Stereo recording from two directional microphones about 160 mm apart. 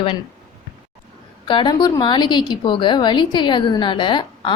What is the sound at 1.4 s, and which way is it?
A woman's voice, 30° left (ahead or behind).